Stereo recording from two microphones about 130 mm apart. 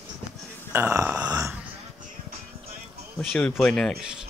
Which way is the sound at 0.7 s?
20° right (ahead or behind).